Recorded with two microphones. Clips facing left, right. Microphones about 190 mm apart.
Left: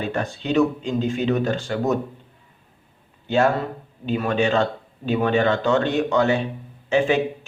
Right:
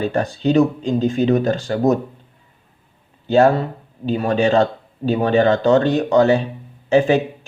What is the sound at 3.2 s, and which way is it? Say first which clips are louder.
Speech: right 6 dB; 35° right (ahead or behind).